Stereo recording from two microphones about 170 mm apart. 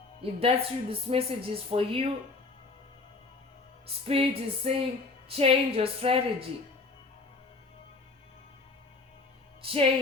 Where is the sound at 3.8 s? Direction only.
35° right (ahead or behind).